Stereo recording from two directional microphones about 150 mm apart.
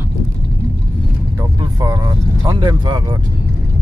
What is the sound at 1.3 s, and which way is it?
Vehicle, 25° right (ahead or behind).